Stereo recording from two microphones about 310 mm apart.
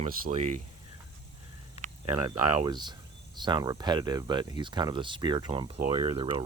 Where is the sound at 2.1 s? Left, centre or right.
Centre.